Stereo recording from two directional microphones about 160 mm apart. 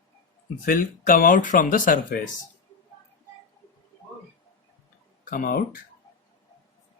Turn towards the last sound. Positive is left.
turn(degrees=60)  # may be behind; listen again after turning